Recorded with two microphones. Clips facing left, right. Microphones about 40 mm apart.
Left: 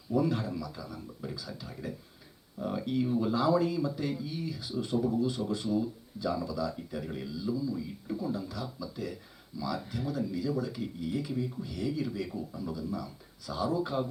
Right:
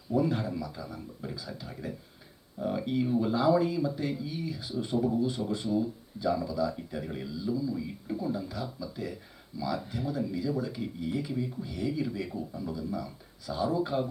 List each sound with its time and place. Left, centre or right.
0.2 s speech: centre
8.1 s speech: centre